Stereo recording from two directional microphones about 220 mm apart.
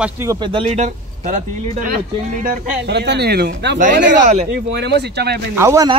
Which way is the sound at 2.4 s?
50° right (ahead or behind).